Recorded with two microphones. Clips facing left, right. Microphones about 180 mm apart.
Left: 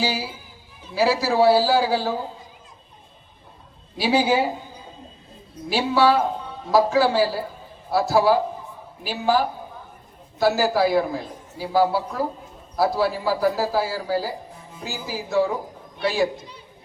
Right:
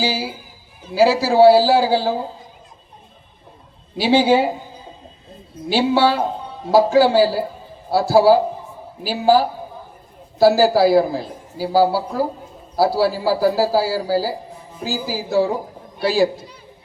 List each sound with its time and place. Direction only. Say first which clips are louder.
0.0 s a man's voice: right 3 dB; 30° right (ahead or behind)
3.9 s a man's voice: right 5 dB; 25° right (ahead or behind)
5.6 s a man's voice: right 3 dB; 30° right (ahead or behind)